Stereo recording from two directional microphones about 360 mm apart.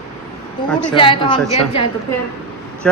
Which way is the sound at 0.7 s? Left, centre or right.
Centre.